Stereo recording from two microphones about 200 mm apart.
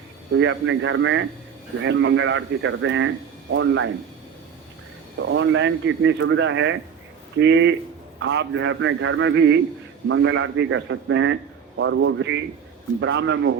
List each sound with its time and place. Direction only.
0.3 s speech: 75° right (ahead or behind)
5.2 s speech: 70° right (ahead or behind)